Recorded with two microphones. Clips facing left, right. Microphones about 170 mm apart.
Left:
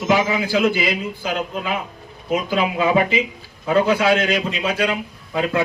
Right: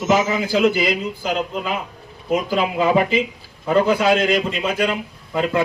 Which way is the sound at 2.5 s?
Centre (ahead or behind).